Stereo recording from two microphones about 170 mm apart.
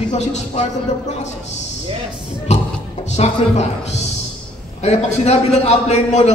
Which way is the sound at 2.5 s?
40° left (ahead or behind).